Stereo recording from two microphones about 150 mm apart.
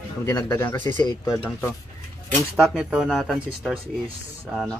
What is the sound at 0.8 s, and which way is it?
Speech, 55° right (ahead or behind).